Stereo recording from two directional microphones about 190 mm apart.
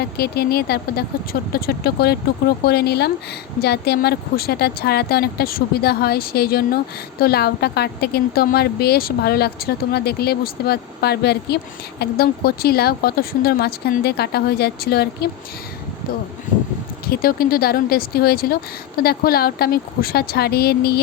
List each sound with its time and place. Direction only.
0.0 s a woman's voice: 55° left (ahead or behind)
17.1 s speech: 50° left (ahead or behind)